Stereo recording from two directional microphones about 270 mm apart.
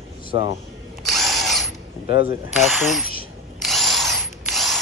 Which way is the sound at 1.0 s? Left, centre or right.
Centre.